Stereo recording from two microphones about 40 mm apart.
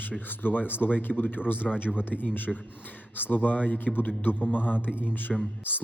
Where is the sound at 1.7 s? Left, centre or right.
Centre.